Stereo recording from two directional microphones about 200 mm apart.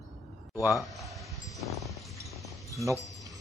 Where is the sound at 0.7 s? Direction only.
Centre (ahead or behind).